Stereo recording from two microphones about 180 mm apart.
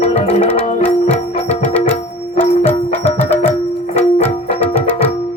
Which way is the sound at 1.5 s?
10° left (ahead or behind).